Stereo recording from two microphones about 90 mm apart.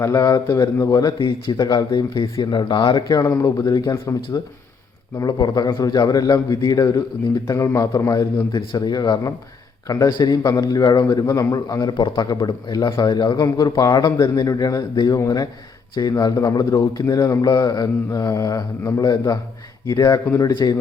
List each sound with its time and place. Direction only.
0.0 s a man's voice: 40° left (ahead or behind); by 3.0 s 60° left (ahead or behind)
3.1 s a man's voice: 35° left (ahead or behind)
8.5 s a man's voice: 55° left (ahead or behind)